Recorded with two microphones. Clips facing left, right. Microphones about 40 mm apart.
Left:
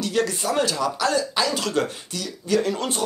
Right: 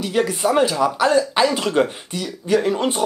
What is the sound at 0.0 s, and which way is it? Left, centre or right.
Speech, centre.